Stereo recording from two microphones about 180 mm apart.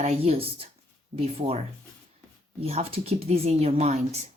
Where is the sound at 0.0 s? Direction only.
35° right (ahead or behind).